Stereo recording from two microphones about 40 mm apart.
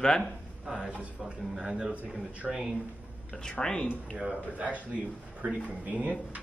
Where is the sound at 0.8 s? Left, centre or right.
Right.